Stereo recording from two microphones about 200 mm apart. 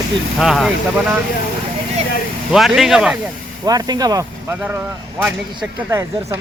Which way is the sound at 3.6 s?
20° right (ahead or behind).